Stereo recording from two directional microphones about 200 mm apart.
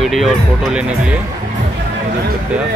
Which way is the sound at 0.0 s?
Centre (ahead or behind).